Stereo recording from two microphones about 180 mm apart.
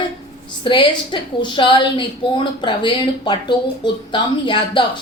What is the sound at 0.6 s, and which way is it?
A woman's voice, 25° left (ahead or behind).